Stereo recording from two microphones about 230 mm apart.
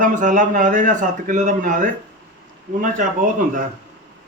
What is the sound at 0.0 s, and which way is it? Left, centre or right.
A man's voice, right.